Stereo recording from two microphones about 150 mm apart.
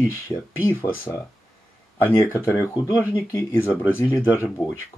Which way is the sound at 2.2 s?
15° left (ahead or behind).